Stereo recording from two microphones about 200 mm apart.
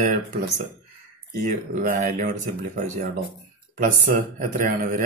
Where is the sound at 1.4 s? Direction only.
40° right (ahead or behind).